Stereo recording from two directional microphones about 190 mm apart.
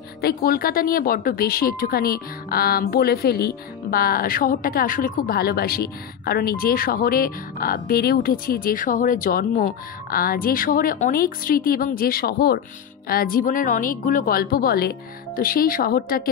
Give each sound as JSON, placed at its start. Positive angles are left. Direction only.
{"t": 0.2, "sound": "speech", "side_deg": 50}